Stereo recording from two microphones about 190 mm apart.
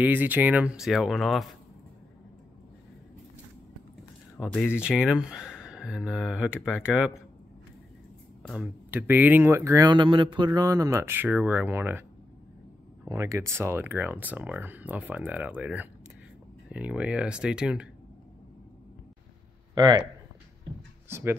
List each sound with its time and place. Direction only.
0.0 s speech: 10° right (ahead or behind)
4.5 s speech: 10° left (ahead or behind)
4.7 s speech: 5° right (ahead or behind)
8.4 s speech: 5° right (ahead or behind)
13.0 s speech: 15° right (ahead or behind)
19.7 s speech: 25° right (ahead or behind)
21.1 s speech: 10° right (ahead or behind)